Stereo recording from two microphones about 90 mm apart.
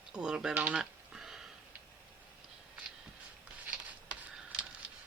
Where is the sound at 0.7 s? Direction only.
5° right (ahead or behind).